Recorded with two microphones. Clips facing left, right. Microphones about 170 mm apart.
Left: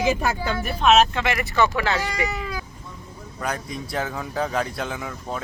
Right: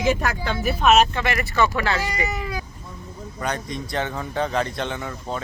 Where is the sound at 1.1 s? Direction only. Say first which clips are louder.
Even; 15° left (ahead or behind).